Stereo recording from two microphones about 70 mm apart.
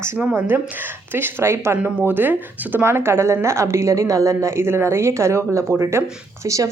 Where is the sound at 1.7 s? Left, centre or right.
Right.